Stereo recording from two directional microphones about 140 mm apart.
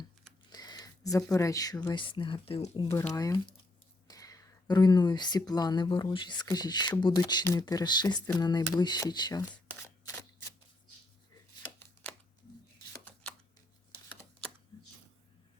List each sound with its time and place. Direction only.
0.5 s speech: 30° left (ahead or behind)
3.1 s speech: 25° left (ahead or behind)
8.7 s shuffling cards: 25° left (ahead or behind)
12.9 s chopping: 5° left (ahead or behind)